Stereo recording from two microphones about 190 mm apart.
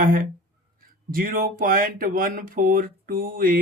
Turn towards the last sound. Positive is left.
turn(degrees=-50)  # may be behind; listen again after turning